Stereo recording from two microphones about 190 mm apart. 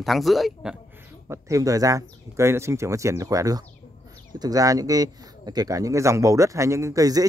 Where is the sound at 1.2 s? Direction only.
15° right (ahead or behind).